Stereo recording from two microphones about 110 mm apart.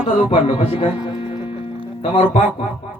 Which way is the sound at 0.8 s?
65° left (ahead or behind).